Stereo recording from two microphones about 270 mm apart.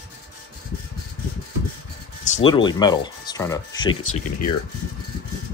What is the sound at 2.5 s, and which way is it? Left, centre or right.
Speech, centre.